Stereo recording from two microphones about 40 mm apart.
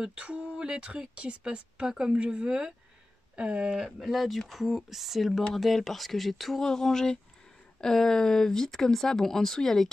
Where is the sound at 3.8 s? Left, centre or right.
Centre.